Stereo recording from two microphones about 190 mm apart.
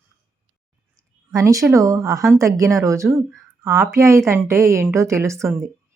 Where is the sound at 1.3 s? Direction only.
15° right (ahead or behind).